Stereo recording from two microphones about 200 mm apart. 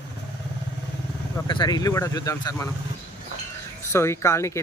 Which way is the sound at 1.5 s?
20° left (ahead or behind).